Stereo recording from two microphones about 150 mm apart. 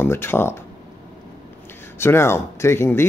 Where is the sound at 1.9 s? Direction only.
15° left (ahead or behind).